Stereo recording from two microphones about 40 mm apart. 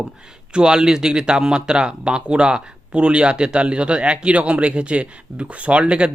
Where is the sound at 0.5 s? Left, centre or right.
Centre.